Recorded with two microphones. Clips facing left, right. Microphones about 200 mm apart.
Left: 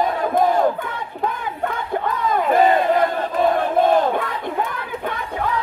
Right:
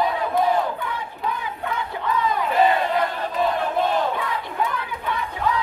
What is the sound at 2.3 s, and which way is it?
Battle cry, 50° left (ahead or behind).